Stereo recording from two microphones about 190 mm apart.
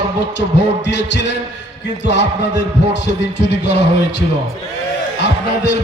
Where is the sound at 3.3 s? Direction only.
65° left (ahead or behind).